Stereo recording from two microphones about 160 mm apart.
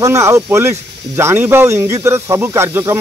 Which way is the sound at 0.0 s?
20° right (ahead or behind).